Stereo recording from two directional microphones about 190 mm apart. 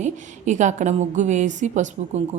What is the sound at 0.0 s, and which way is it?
A woman's voice, 40° right (ahead or behind).